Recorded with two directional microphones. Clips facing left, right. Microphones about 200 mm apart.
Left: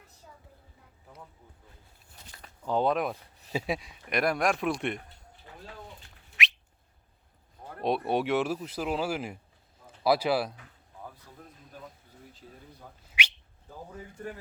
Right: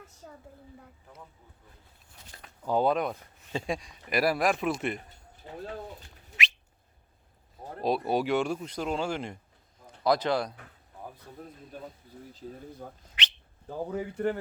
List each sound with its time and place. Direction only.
0.2 s a sound: 60° right (ahead or behind)
2.6 s speech: 5° right (ahead or behind)
5.5 s a sound: 25° right (ahead or behind)
6.4 s bird: centre (ahead or behind)
7.8 s speech: centre (ahead or behind)
12.3 s speech: 40° right (ahead or behind)
13.1 s bird: 10° left (ahead or behind)
13.7 s speech: 75° right (ahead or behind)